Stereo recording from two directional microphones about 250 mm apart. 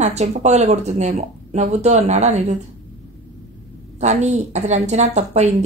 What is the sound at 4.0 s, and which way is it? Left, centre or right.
Speech, right.